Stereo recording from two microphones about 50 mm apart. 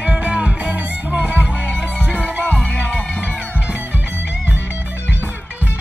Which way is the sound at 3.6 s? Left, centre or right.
Right.